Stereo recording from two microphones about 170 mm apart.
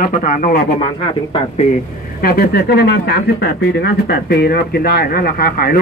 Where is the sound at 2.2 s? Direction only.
65° left (ahead or behind).